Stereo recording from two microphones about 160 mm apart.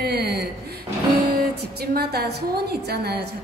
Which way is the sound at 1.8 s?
85° right.